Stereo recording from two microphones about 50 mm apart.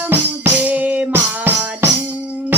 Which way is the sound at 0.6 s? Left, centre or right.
Right.